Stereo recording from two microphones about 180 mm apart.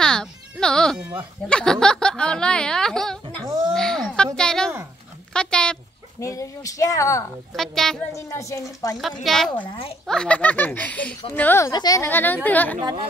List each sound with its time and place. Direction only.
0.0 s music: 5° left (ahead or behind)
1.5 s speech: 5° left (ahead or behind)
3.4 s speech: 20° right (ahead or behind)
3.7 s a sound: 5° left (ahead or behind)
4.4 s speech: 5° left (ahead or behind)
6.1 s a woman's voice: 15° left (ahead or behind)
7.5 s speech: centre (ahead or behind)
8.1 s a woman's voice: 15° left (ahead or behind)
9.2 s speech: centre (ahead or behind)
9.7 s speech: 30° left (ahead or behind)
10.0 s a woman's voice: 5° left (ahead or behind)